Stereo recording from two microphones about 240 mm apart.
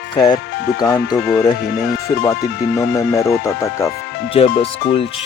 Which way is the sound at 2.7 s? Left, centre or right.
Centre.